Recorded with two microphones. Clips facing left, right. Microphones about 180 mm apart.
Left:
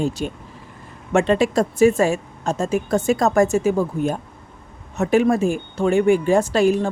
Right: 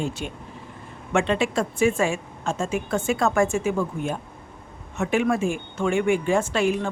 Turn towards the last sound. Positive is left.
turn(degrees=40)  # may be behind; listen again after turning